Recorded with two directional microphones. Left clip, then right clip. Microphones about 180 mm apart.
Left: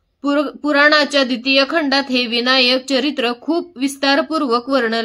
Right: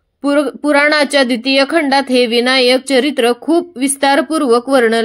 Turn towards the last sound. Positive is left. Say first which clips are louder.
# right 6 dB
turn(degrees=-30)  # may be behind; listen again after turning